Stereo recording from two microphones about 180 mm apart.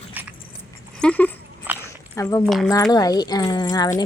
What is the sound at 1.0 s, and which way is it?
Speech, 10° left (ahead or behind).